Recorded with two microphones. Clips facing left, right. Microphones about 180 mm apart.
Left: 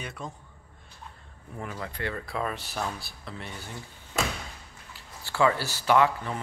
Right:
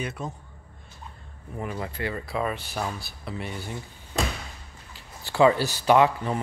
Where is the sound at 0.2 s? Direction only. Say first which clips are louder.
Right 4 dB; 5° right (ahead or behind).